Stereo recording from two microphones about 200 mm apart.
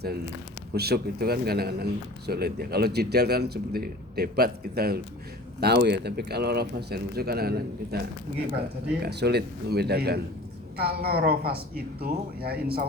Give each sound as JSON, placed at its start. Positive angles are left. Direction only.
{"t": 0.7, "sound": "speech", "side_deg": -55}